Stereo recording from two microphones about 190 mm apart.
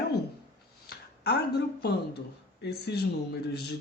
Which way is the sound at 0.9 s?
60° left (ahead or behind).